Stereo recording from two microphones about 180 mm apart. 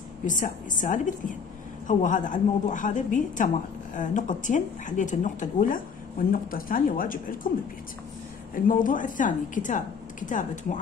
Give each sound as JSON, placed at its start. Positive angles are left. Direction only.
{"t": 0.3, "sound": "speech", "side_deg": 45}
{"t": 8.6, "sound": "speech", "side_deg": 50}